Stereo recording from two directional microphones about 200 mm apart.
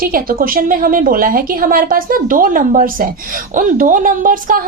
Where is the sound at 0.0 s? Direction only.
45° right (ahead or behind).